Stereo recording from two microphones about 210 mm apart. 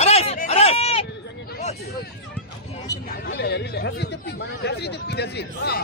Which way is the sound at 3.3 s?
50° left (ahead or behind).